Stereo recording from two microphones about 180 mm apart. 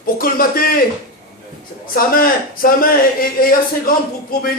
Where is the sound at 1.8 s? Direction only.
55° left (ahead or behind).